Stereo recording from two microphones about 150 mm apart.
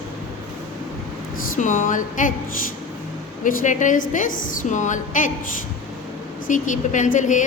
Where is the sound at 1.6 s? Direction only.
55° left (ahead or behind).